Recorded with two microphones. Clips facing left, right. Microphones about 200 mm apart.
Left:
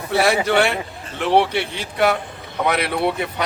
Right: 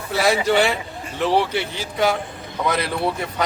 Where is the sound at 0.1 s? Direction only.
60° left (ahead or behind).